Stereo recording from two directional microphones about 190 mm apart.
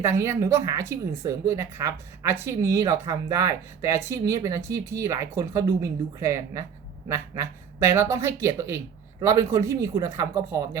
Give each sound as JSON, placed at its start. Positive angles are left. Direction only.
{"t": 0.0, "sound": "speech", "side_deg": -15}